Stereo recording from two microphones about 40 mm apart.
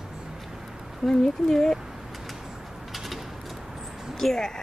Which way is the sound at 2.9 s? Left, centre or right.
Centre.